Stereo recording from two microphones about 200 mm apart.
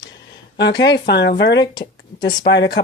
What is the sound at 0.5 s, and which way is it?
Speech, 60° left (ahead or behind).